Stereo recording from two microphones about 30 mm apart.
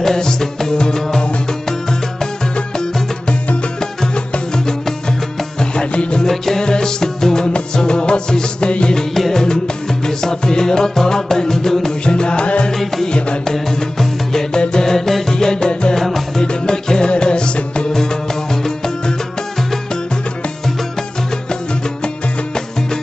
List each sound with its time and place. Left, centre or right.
0.0 s music: centre
5.9 s music: left
6.2 s music: centre
6.6 s music: left
7.7 s music of bollywood: left
9.3 s music: left
12.0 s music: left
13.5 s music: centre
14.5 s music: left
15.0 s music: centre; by 17.8 s left
17.9 s music: centre